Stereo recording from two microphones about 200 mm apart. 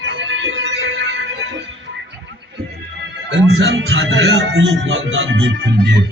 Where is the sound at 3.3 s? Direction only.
75° right (ahead or behind).